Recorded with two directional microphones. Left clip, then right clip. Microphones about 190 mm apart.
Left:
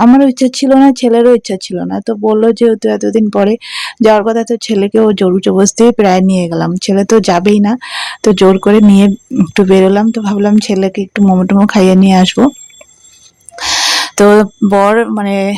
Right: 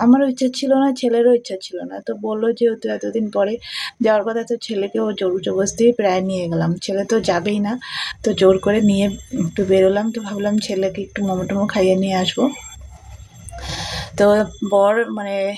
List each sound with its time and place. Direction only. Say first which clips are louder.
0.0 s speech: left 8 dB; 35° left (ahead or behind)
13.6 s speech: left 16 dB; 35° left (ahead or behind)